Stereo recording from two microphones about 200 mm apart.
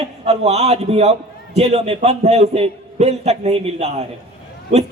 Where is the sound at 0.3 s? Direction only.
30° right (ahead or behind).